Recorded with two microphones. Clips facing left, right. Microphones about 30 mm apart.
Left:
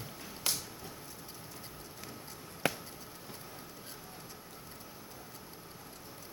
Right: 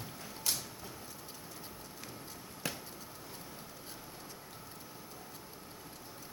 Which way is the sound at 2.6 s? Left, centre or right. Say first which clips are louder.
Left 7 dB; left.